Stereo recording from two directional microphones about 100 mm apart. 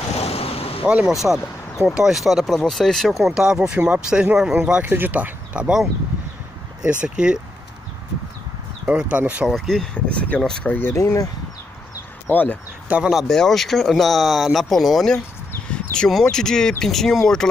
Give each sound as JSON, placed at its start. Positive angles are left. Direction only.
{"t": 0.2, "sound": "vehicle", "side_deg": 85}
{"t": 0.8, "sound": "speech", "side_deg": -10}
{"t": 4.8, "sound": "speech", "side_deg": -20}
{"t": 8.8, "sound": "speech", "side_deg": -15}
{"t": 9.5, "sound": "speech", "side_deg": 5}
{"t": 11.0, "sound": "speech", "side_deg": 30}
{"t": 12.3, "sound": "speech", "side_deg": 20}
{"t": 12.8, "sound": "speech", "side_deg": -15}
{"t": 13.1, "sound": "speech", "side_deg": 0}